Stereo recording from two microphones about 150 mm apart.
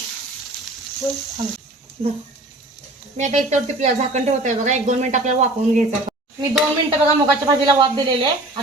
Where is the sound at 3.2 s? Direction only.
50° right (ahead or behind).